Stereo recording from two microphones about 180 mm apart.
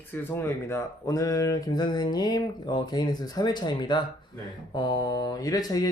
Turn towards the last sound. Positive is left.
turn(degrees=20)  # may be behind; listen again after turning